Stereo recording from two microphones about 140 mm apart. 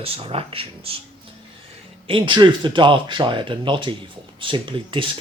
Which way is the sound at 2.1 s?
35° right (ahead or behind).